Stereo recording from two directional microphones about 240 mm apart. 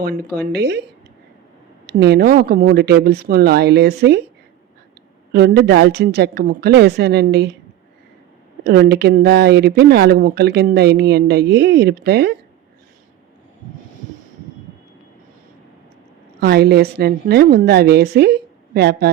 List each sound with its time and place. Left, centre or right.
0.0 s a woman's voice: right
2.0 s speech: right
5.3 s speech: right
8.6 s speech: right
16.4 s a woman's voice: right